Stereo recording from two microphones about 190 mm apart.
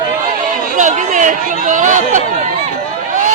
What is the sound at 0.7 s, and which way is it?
Chatter, 40° right (ahead or behind).